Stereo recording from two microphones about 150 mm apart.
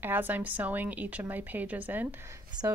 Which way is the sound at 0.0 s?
15° right (ahead or behind).